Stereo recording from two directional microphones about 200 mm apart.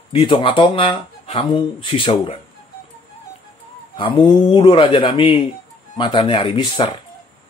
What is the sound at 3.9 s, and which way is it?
Speech, 25° left (ahead or behind).